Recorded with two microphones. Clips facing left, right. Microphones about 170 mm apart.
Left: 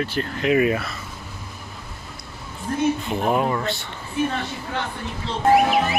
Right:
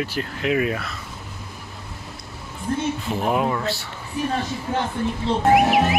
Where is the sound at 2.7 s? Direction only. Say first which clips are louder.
Even; 25° right (ahead or behind).